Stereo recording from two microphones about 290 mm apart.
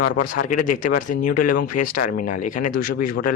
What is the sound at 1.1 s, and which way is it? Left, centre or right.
Speech, left.